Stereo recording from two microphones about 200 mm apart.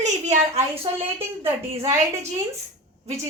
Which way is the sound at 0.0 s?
35° right (ahead or behind).